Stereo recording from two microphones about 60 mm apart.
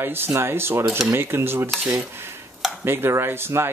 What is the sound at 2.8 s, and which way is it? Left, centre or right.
Speech, right.